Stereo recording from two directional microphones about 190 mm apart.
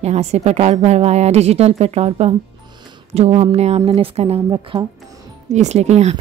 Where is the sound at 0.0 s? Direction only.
35° right (ahead or behind).